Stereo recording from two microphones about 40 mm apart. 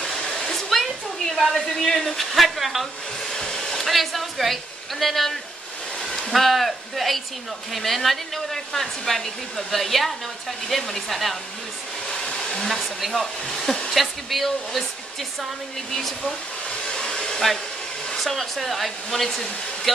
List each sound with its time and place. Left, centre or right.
0.5 s a sound: centre
2.0 s speech: centre
3.3 s speech: centre
13.1 s hair dryer: centre
13.9 s speech: centre
16.8 s hair dryer: centre
18.1 s speech: centre